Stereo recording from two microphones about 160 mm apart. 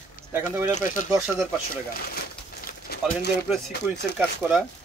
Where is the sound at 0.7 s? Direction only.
55° left (ahead or behind).